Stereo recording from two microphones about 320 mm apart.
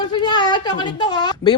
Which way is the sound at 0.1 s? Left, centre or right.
Centre.